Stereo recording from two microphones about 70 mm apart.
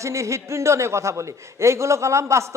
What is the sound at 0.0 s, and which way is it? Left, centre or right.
A man's voice, right.